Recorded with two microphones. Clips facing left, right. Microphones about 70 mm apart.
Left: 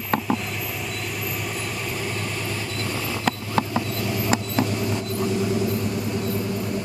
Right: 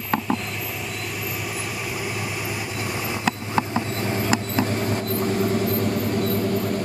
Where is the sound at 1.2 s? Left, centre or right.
Centre.